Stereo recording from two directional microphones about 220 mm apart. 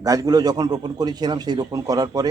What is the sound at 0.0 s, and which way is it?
A man's voice, 15° right (ahead or behind).